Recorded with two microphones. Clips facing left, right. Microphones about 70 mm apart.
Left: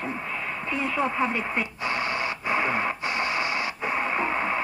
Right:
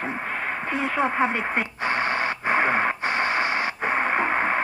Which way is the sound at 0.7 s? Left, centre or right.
Right.